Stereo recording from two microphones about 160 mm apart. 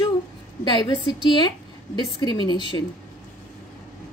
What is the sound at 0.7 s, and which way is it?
A woman's voice, 30° left (ahead or behind).